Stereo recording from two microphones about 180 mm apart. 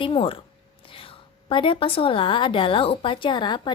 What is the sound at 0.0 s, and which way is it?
A woman's voice, 30° left (ahead or behind).